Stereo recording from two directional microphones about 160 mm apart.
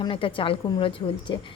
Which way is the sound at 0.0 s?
35° left (ahead or behind).